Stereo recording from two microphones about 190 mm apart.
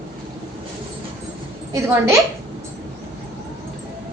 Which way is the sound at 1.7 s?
15° right (ahead or behind).